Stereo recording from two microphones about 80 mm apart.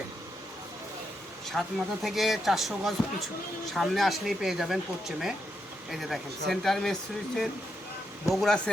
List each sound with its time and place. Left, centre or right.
1.5 s speech: centre
8.3 s speech: centre